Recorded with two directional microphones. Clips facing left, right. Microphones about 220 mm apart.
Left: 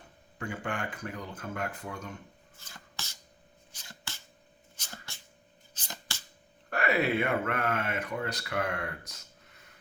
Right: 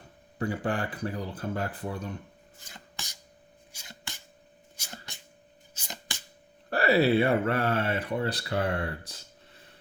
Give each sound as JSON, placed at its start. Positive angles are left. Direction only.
{"t": 0.3, "sound": "speech", "side_deg": -35}
{"t": 2.6, "sound": "a sound", "side_deg": -15}
{"t": 5.7, "sound": "chopping", "side_deg": -15}
{"t": 6.7, "sound": "speech", "side_deg": -35}